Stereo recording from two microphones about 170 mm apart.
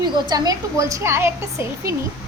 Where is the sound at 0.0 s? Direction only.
25° right (ahead or behind).